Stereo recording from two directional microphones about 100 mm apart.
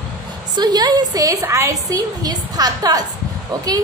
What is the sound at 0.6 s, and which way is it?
A woman's voice, 40° right (ahead or behind).